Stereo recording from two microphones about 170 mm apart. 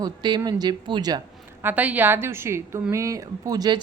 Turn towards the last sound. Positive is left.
turn(degrees=-25)  # may be behind; listen again after turning